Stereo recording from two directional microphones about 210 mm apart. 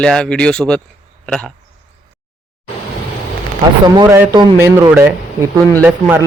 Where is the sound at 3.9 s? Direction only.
15° right (ahead or behind).